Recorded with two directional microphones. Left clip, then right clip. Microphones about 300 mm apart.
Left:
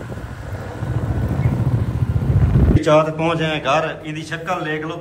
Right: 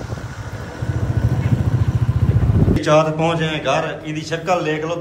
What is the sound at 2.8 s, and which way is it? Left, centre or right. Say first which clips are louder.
A man's voice: even; centre.